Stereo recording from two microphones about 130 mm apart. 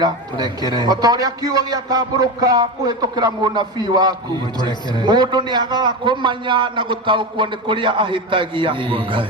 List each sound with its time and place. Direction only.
0.0 s a man's voice: 30° right (ahead or behind)